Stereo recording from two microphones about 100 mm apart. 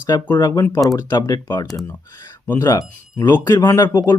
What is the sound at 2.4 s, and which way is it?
Speech, 20° left (ahead or behind).